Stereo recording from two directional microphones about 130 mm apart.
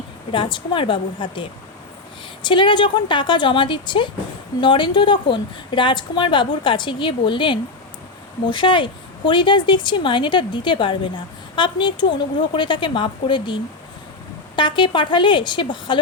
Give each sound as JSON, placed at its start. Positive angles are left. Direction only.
{"t": 0.3, "sound": "speech", "side_deg": 40}